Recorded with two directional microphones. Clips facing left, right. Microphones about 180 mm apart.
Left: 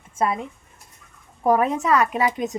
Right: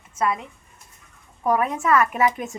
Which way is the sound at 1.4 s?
25° left (ahead or behind).